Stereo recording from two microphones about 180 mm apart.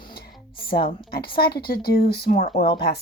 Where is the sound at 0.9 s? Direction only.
55° left (ahead or behind).